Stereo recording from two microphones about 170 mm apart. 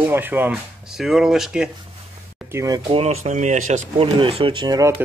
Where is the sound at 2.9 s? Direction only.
40° right (ahead or behind).